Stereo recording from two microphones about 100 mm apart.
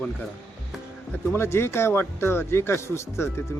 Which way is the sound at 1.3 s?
25° left (ahead or behind).